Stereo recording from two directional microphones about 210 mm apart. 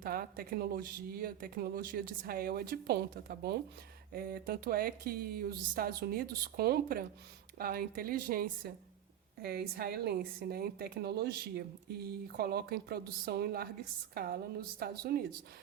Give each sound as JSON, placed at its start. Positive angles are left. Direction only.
{"t": 0.0, "sound": "speech", "side_deg": -45}